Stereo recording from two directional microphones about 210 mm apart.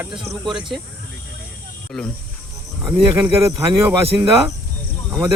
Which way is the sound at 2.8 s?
5° right (ahead or behind).